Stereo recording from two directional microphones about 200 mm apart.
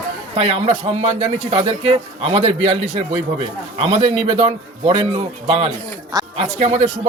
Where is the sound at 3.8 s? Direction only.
30° right (ahead or behind).